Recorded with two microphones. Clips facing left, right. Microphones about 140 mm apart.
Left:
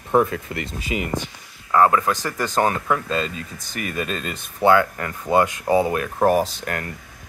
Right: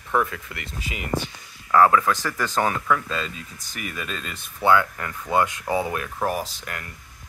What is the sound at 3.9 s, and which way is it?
Speech, 25° left (ahead or behind).